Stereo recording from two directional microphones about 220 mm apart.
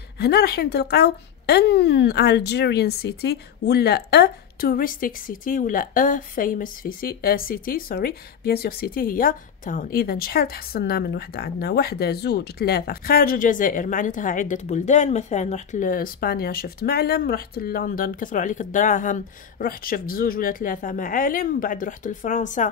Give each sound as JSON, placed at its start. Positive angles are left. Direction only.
{"t": 0.2, "sound": "speech", "side_deg": 45}